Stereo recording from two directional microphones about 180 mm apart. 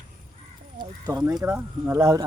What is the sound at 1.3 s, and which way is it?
Speech, 15° right (ahead or behind).